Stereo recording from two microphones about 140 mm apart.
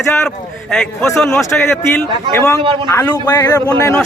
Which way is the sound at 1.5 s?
15° left (ahead or behind).